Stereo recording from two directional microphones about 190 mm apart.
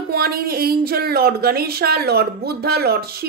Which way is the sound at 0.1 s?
55° right (ahead or behind).